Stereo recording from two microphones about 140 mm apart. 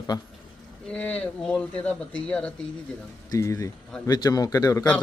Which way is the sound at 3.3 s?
20° left (ahead or behind).